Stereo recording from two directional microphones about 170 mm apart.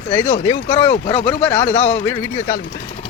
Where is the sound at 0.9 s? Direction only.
35° left (ahead or behind).